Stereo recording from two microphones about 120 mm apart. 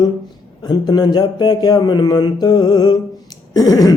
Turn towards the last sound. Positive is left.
turn(degrees=30)  # may be behind; listen again after turning